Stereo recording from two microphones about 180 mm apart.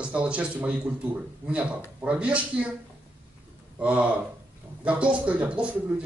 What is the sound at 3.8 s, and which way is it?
A man's voice, 5° right (ahead or behind).